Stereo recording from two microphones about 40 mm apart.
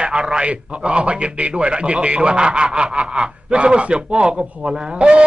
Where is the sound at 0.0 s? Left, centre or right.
Right.